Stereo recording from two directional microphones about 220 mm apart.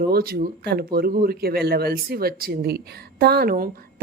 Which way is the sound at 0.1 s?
45° right (ahead or behind).